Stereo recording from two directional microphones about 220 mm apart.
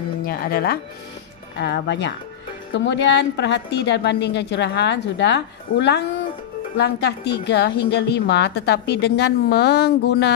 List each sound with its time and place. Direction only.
0.2 s a woman's voice: 40° left (ahead or behind)